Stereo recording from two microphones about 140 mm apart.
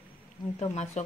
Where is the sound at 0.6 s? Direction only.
55° left (ahead or behind).